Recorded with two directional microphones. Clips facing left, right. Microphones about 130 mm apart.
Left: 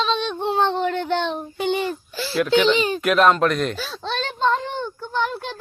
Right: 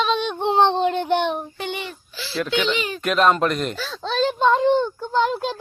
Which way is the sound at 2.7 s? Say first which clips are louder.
Left 5 dB; 30° left (ahead or behind).